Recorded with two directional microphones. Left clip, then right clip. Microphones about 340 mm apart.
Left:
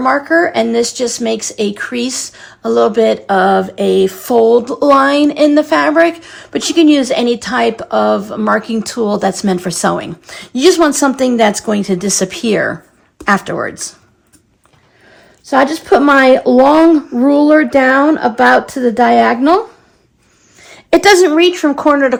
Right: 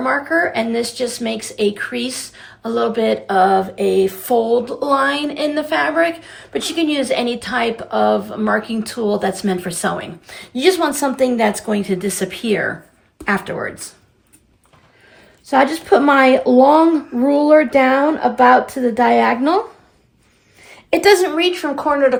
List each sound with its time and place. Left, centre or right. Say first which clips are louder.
0.0 s speech: left 6 dB; centre
15.4 s speech: left 3 dB; left
20.7 s speech: left 4 dB; left